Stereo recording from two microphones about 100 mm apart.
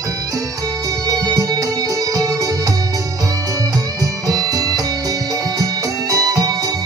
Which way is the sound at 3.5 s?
35° right (ahead or behind).